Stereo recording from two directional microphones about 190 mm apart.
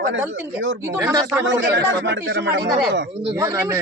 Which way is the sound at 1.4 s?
75° right (ahead or behind).